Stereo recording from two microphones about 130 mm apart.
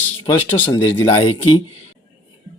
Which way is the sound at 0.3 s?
15° left (ahead or behind).